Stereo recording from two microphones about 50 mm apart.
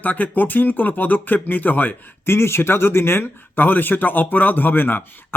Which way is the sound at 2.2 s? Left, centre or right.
Left.